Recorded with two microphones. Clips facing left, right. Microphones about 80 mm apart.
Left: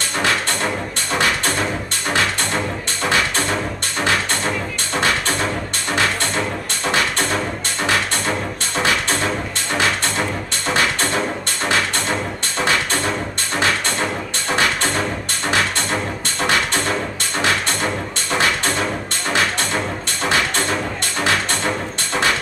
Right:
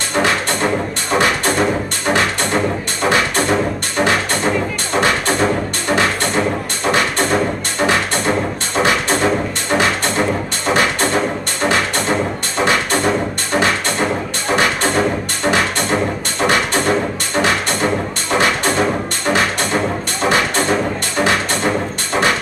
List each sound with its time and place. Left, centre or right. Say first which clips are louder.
0.2 s music: right 4 dB; right